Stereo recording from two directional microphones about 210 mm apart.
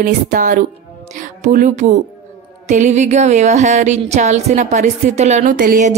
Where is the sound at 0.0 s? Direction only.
40° right (ahead or behind).